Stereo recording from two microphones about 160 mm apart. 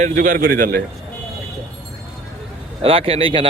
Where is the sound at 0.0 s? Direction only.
60° right (ahead or behind).